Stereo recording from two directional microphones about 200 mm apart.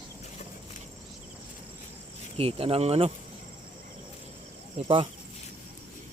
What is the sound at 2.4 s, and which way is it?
Speech, 30° right (ahead or behind).